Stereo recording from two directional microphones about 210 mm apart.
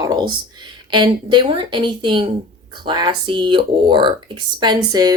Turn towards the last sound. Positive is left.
turn(degrees=-20)  # may be behind; listen again after turning